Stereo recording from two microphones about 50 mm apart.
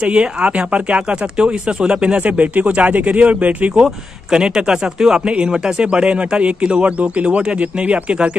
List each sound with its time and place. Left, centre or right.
0.0 s speech: right
2.2 s speech: right
3.8 s speech: centre